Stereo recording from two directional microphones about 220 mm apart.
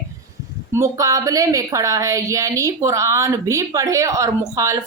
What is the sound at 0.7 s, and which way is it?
A woman's voice, 15° right (ahead or behind).